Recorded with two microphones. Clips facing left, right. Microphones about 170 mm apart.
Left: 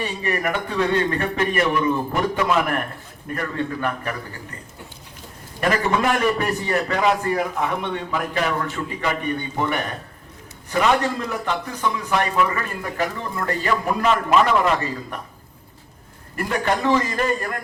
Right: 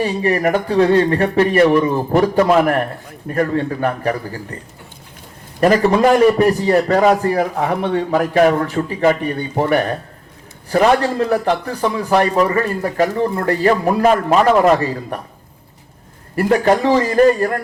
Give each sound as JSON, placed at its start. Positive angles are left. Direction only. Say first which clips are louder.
{"t": 0.0, "sound": "speech", "louder": "right 8 dB", "side_deg": -35}
{"t": 5.5, "sound": "speech", "louder": "right 8 dB", "side_deg": -35}
{"t": 16.3, "sound": "speech", "louder": "right 9 dB", "side_deg": -40}